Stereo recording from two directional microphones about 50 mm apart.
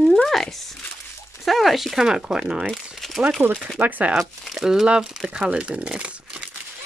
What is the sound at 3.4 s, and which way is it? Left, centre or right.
Speech, right.